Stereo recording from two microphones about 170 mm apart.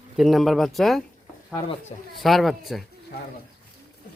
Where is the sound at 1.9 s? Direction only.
35° left (ahead or behind).